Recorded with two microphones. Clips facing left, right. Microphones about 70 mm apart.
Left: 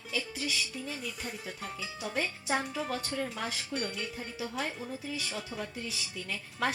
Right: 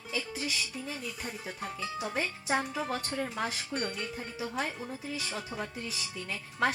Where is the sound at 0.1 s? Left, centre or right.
Centre.